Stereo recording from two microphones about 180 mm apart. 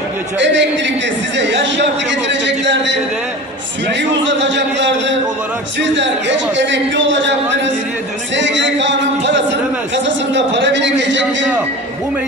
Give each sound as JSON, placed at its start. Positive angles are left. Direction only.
{"t": 0.4, "sound": "a man's voice", "side_deg": -85}
{"t": 4.1, "sound": "a man's voice", "side_deg": -85}